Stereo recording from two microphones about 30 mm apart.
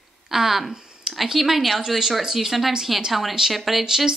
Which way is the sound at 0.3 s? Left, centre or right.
Centre.